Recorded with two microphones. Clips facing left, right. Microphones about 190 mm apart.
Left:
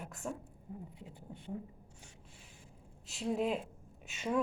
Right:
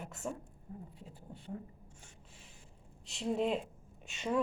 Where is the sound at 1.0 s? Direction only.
15° left (ahead or behind).